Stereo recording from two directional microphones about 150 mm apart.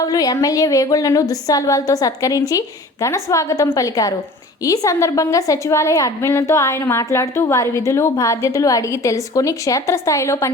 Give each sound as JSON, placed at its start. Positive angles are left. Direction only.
{"t": 0.0, "sound": "a woman's voice", "side_deg": 25}